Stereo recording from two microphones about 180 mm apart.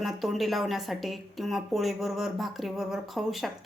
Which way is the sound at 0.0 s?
Centre (ahead or behind).